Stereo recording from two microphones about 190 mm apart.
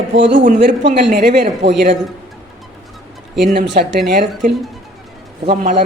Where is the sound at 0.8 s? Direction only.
60° right (ahead or behind).